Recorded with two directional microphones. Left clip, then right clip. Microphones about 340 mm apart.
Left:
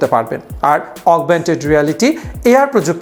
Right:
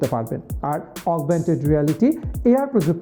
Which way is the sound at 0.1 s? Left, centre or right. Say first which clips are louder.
Left 11 dB; centre.